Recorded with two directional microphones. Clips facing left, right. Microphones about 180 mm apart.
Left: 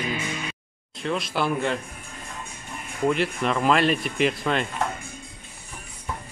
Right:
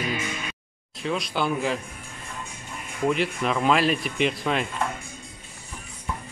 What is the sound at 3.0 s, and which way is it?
Speech, centre (ahead or behind).